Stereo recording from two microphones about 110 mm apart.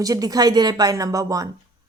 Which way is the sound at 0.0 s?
35° right (ahead or behind).